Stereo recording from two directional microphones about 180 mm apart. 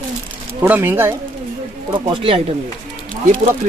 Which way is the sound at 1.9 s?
30° right (ahead or behind).